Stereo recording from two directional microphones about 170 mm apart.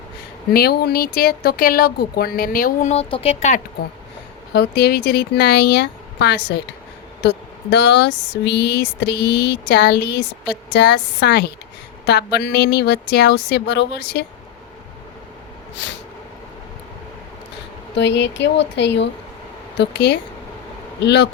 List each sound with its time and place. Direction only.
0.5 s speech: 65° left (ahead or behind)
2.9 s speech: 35° left (ahead or behind)
4.5 s speech: 75° left (ahead or behind)
10.5 s speech: 90° left
15.7 s a sound: 90° left
17.9 s speech: 90° left